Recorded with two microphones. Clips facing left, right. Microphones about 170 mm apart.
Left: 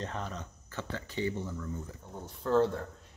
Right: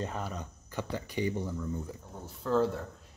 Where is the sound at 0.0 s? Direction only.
10° right (ahead or behind).